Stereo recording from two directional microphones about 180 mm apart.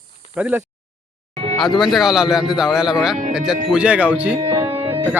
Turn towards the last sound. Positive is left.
turn(degrees=-15)  # may be behind; listen again after turning